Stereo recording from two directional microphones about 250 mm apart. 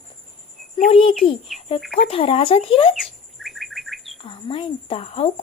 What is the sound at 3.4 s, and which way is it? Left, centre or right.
Bird, centre.